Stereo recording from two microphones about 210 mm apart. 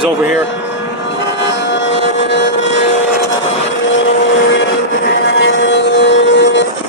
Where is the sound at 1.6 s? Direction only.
55° left (ahead or behind).